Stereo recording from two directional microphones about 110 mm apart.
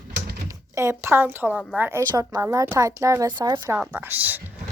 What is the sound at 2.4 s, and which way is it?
Speech, 25° right (ahead or behind).